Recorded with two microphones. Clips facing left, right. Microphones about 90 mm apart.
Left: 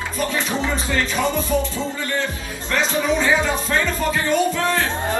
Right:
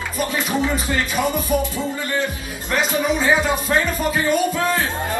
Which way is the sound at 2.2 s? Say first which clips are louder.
Right 1 dB; 15° right (ahead or behind).